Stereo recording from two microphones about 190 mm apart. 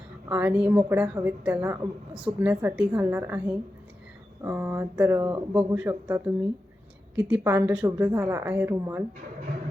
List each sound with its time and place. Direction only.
0.3 s a woman's voice: 10° right (ahead or behind)